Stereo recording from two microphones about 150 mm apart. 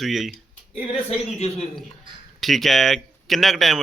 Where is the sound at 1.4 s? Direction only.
45° left (ahead or behind).